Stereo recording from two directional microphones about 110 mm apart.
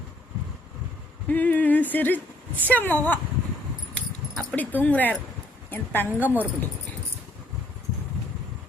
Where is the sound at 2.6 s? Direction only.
15° left (ahead or behind).